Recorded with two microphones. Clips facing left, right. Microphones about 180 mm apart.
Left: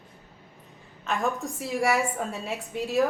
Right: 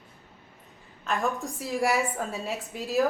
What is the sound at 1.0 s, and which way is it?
A woman's voice, centre (ahead or behind).